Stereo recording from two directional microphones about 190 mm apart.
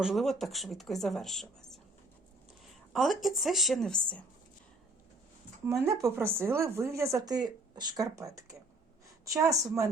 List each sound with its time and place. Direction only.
0.0 s speech: centre (ahead or behind)
2.9 s speech: centre (ahead or behind)
5.6 s a woman's voice: 15° right (ahead or behind)